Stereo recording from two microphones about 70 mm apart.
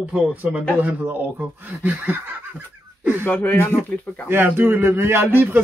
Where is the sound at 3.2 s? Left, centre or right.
Left.